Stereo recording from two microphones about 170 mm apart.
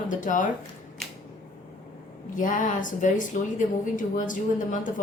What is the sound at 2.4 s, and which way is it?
A woman's voice, 50° left (ahead or behind).